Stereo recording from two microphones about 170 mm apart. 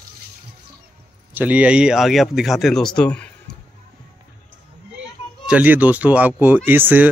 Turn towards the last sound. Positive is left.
turn(degrees=-10)  # may be behind; listen again after turning